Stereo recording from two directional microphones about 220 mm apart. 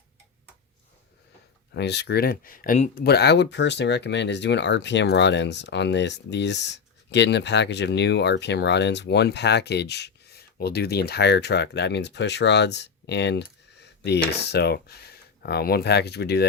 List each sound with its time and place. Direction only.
1.7 s speech: 50° left (ahead or behind)